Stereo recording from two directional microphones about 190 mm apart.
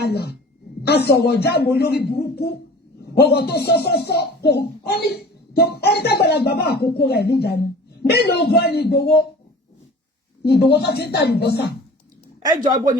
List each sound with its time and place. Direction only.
0.0 s a child's voice: 60° left (ahead or behind)
10.4 s a child's voice: 60° left (ahead or behind)
12.6 s speech: 20° right (ahead or behind)